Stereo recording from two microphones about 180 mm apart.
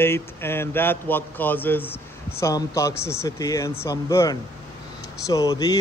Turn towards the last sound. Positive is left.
turn(degrees=20)  # may be behind; listen again after turning